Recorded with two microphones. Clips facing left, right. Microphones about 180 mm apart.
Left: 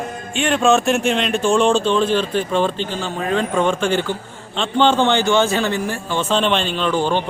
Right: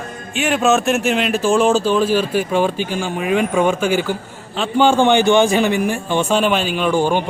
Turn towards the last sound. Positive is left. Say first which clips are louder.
# right 2 dB
turn(degrees=-10)  # may be behind; listen again after turning